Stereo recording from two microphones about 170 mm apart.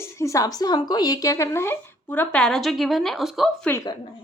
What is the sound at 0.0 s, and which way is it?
Speech, 15° left (ahead or behind).